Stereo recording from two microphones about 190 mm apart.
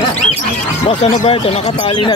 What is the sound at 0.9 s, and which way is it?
Speech, 30° left (ahead or behind).